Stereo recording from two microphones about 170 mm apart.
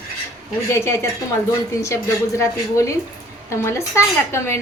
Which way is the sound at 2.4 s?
15° left (ahead or behind).